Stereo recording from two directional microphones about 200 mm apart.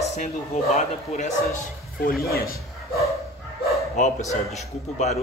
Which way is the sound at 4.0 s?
35° left (ahead or behind).